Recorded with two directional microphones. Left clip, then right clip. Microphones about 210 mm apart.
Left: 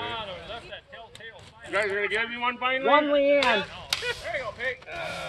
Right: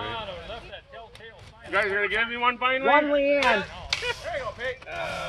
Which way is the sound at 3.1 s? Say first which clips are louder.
Even; 5° right (ahead or behind).